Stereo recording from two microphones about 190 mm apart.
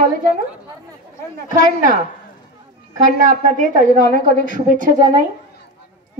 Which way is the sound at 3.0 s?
45° right (ahead or behind).